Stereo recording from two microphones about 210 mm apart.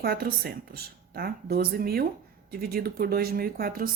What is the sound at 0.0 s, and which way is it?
Speech, 50° right (ahead or behind).